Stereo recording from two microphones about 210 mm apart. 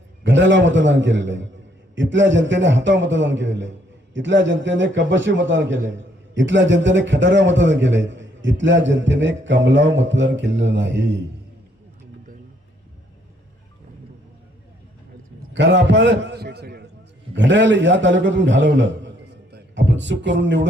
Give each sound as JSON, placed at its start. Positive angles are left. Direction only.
{"t": 0.2, "sound": "a man's voice", "side_deg": -60}
{"t": 15.5, "sound": "a man's voice", "side_deg": -55}